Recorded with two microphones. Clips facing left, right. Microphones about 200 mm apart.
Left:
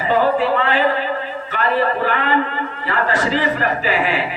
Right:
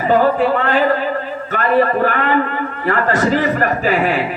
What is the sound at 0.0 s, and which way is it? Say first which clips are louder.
A man's voice: right 3 dB; 45° right (ahead or behind).